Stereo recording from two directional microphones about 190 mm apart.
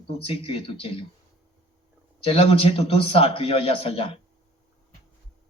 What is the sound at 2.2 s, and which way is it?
Speech, 30° left (ahead or behind).